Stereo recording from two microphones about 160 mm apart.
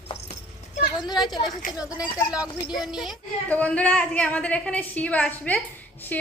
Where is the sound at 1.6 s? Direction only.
60° left (ahead or behind).